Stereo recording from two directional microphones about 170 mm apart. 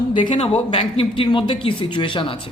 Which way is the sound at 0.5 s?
40° left (ahead or behind).